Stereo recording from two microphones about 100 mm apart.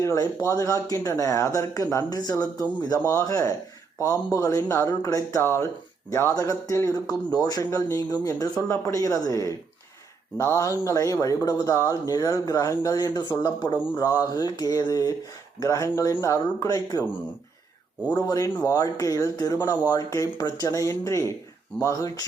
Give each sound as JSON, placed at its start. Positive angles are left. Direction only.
{"t": 0.0, "sound": "a man's voice", "side_deg": 30}
{"t": 6.3, "sound": "a man's voice", "side_deg": 35}
{"t": 13.9, "sound": "a man's voice", "side_deg": 35}
{"t": 18.1, "sound": "a man's voice", "side_deg": 40}